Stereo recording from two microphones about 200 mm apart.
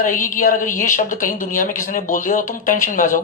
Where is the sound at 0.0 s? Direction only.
40° left (ahead or behind).